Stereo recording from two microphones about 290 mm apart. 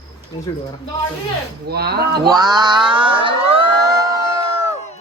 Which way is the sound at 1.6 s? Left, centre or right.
Right.